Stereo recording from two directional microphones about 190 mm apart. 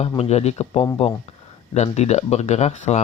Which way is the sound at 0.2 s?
35° left (ahead or behind).